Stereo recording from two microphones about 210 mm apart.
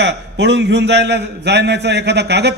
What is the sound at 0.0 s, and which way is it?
A man's voice, 55° right (ahead or behind).